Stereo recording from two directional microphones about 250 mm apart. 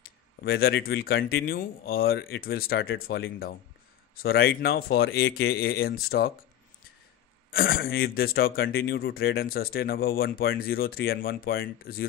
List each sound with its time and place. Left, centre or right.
0.4 s speech: left
7.5 s speech: left